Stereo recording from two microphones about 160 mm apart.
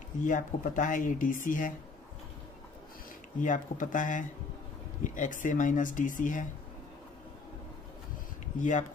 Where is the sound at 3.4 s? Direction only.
55° left (ahead or behind).